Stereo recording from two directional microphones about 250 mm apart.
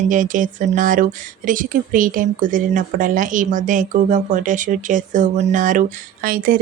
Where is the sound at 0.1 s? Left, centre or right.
Right.